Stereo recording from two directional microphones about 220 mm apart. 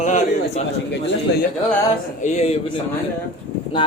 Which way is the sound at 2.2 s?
30° left (ahead or behind).